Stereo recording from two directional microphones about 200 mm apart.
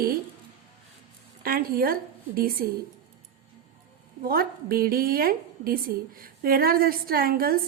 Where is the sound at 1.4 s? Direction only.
45° right (ahead or behind).